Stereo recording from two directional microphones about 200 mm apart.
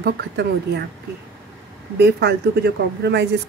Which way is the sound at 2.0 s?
55° right (ahead or behind).